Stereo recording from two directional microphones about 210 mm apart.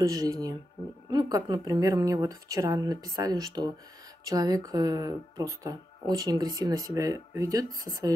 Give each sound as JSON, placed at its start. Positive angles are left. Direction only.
{"t": 0.0, "sound": "speech", "side_deg": -15}